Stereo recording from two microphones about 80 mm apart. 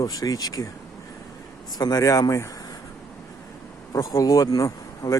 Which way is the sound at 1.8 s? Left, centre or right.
Left.